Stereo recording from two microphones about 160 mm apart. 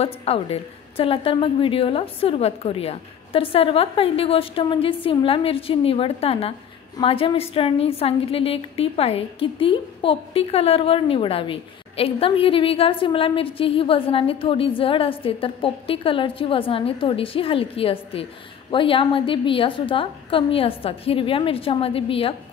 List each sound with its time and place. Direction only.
0.0 s a woman's voice: 40° left (ahead or behind)